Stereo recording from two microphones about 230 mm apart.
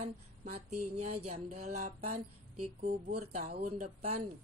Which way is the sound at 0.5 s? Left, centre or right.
Right.